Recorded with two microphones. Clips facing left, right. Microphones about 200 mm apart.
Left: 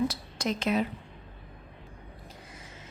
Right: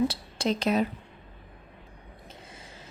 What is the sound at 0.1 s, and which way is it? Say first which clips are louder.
Speech: right 3 dB; 30° right (ahead or behind).